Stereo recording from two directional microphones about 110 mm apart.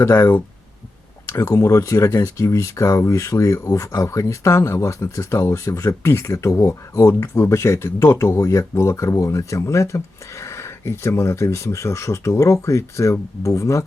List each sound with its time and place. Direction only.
0.0 s speech: 20° left (ahead or behind)